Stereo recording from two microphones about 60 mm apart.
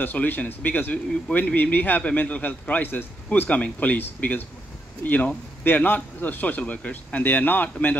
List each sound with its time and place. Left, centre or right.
0.0 s speech: left